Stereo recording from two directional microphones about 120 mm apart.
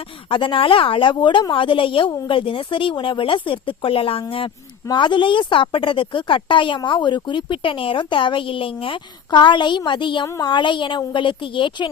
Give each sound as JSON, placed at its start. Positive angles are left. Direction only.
{"t": 0.3, "sound": "speech", "side_deg": 45}
{"t": 10.2, "sound": "a child's voice", "side_deg": 25}
{"t": 10.5, "sound": "speech", "side_deg": 40}